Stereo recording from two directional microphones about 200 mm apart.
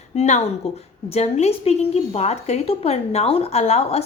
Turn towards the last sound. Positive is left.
turn(degrees=30)  # may be behind; listen again after turning